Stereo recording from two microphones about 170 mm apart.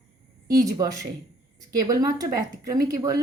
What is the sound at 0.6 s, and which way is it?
A woman's voice, 20° right (ahead or behind).